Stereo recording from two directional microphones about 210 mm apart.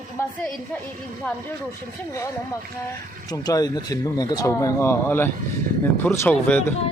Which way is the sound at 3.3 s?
20° left (ahead or behind).